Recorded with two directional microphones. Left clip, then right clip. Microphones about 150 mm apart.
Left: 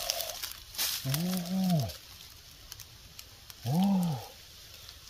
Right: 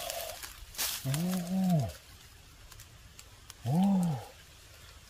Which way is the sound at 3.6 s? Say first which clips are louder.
Even; 15° left (ahead or behind).